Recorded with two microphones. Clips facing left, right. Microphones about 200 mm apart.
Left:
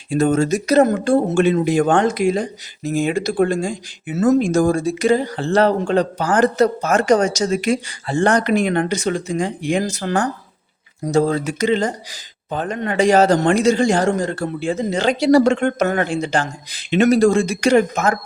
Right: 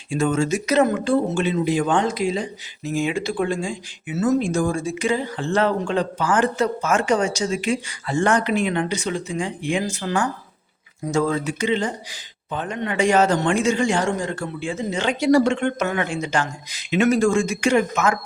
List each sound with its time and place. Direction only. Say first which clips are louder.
0.1 s speech: left 4 dB; 40° left (ahead or behind)